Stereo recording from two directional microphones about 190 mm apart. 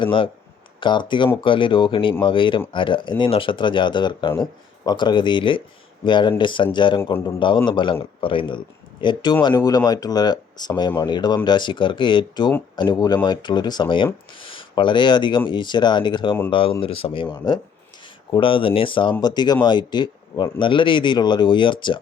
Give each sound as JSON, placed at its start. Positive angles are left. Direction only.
{"t": 0.0, "sound": "speech", "side_deg": 25}
{"t": 7.0, "sound": "a man's voice", "side_deg": 15}
{"t": 7.3, "sound": "speech", "side_deg": 25}